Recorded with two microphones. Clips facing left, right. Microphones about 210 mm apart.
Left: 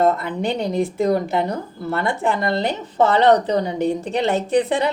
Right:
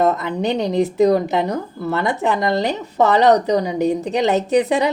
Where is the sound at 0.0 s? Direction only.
20° right (ahead or behind).